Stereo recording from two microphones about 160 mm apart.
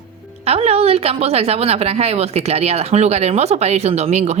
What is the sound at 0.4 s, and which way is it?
A woman's voice, 40° right (ahead or behind).